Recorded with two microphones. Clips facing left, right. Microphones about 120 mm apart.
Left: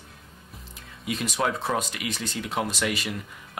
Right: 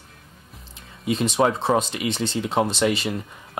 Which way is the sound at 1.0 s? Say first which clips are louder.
Right 7 dB; 25° right (ahead or behind).